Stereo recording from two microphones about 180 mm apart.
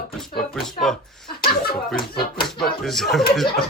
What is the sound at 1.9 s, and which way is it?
Music, 60° left (ahead or behind).